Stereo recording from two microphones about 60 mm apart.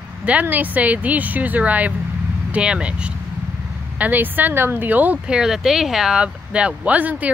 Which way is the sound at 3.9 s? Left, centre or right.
Right.